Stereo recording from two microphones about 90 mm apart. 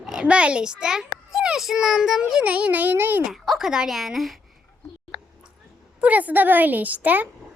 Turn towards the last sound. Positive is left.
turn(degrees=-15)  # may be behind; listen again after turning